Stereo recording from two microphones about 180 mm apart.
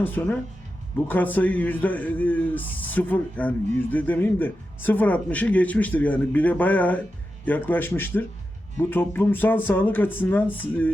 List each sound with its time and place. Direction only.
0.0 s speech: 10° left (ahead or behind)